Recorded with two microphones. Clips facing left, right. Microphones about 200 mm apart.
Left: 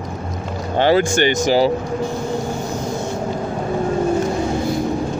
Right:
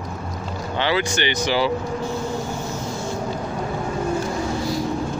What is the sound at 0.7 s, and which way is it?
Speech, 45° left (ahead or behind).